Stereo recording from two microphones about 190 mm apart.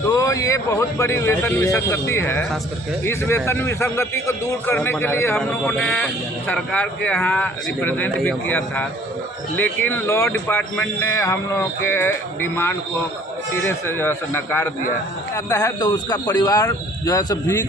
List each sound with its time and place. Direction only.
0.1 s a man's voice: 15° left (ahead or behind)